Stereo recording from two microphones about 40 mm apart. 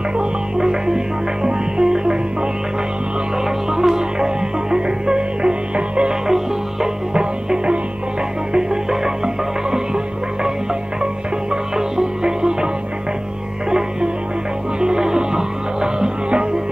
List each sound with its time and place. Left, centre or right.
0.2 s music: centre
3.7 s music: centre
6.2 s music: centre
11.7 s music: centre
14.8 s music: centre